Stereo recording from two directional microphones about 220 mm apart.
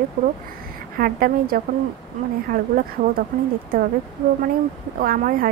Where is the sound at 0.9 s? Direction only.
40° right (ahead or behind).